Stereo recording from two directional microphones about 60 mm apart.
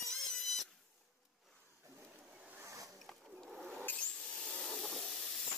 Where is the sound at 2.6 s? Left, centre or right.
Right.